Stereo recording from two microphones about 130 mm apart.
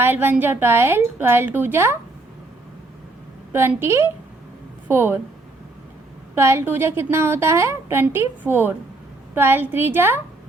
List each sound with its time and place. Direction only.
0.0 s a woman's voice: 15° right (ahead or behind)
3.5 s a woman's voice: 20° right (ahead or behind)
6.3 s a woman's voice: 20° right (ahead or behind)